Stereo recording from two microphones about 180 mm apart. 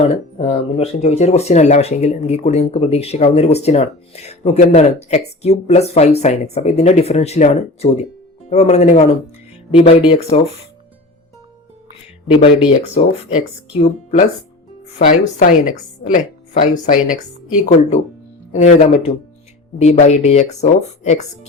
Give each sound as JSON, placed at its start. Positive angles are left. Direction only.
{"t": 0.0, "sound": "speech", "side_deg": 35}
{"t": 13.7, "sound": "speech", "side_deg": 40}